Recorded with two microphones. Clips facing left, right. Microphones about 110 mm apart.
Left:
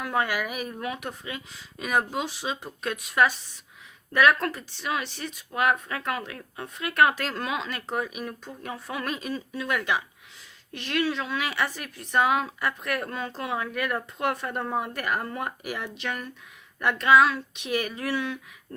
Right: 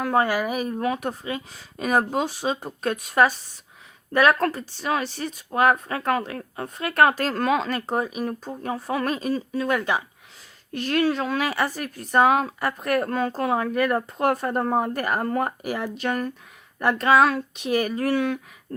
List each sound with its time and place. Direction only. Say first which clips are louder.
0.0 s a woman's voice: right 6 dB; 35° right (ahead or behind)